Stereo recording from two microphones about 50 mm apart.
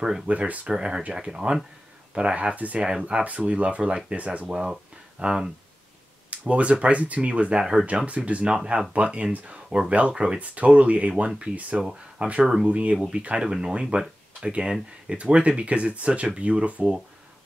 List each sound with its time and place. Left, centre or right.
0.3 s speech: right
6.3 s speech: right
12.2 s speech: right
12.9 s speech: centre